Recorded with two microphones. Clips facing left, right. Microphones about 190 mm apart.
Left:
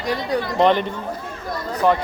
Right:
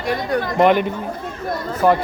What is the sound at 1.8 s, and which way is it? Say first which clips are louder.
Speech: right 2 dB; 5° right (ahead or behind).